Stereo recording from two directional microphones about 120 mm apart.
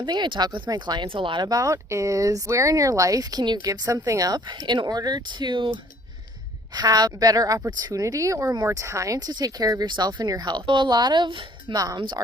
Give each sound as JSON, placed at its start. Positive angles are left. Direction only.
{"t": 0.0, "sound": "speech", "side_deg": -40}
{"t": 1.5, "sound": "speech", "side_deg": -30}
{"t": 6.7, "sound": "speech", "side_deg": -35}